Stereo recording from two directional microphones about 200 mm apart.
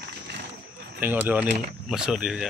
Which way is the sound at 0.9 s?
10° right (ahead or behind).